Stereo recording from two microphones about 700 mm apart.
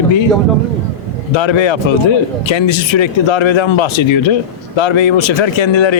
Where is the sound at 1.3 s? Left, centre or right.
Left.